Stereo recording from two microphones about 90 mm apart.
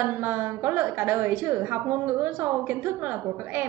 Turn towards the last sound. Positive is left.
turn(degrees=-20)  # may be behind; listen again after turning